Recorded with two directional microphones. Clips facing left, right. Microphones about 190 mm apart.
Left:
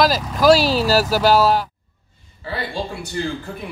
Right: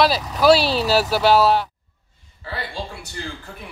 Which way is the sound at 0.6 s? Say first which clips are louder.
Left 2 dB; 5° left (ahead or behind).